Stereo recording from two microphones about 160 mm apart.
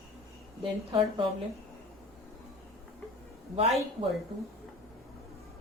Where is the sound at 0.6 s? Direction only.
30° right (ahead or behind).